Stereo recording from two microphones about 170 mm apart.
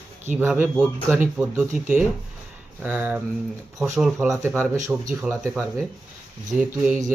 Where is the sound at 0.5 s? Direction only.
5° right (ahead or behind).